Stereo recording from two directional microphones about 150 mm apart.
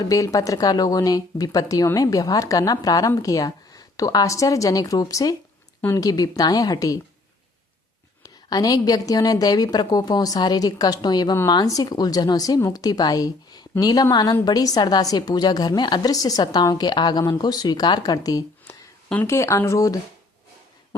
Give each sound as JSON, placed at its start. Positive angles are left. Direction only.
{"t": 0.0, "sound": "a woman's voice", "side_deg": 20}
{"t": 8.2, "sound": "a woman's voice", "side_deg": 25}